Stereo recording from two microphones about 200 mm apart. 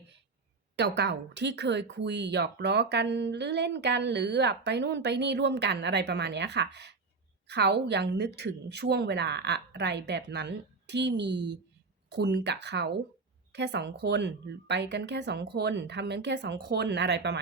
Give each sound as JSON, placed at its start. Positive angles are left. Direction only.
{"t": 0.8, "sound": "speech", "side_deg": -55}